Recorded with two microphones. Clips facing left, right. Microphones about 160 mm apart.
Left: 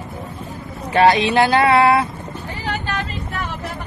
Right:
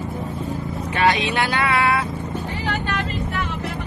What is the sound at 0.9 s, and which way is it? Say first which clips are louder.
Vehicle: left 6 dB; 35° left (ahead or behind).